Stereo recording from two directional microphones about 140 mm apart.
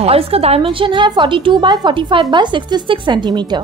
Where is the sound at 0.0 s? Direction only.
45° right (ahead or behind).